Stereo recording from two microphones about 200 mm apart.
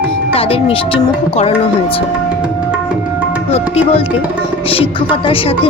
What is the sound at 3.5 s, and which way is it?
A woman's voice, 30° left (ahead or behind).